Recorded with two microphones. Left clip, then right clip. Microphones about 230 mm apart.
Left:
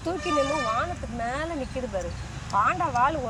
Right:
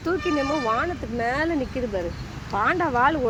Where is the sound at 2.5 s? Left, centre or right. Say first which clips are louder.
Right 1 dB; right.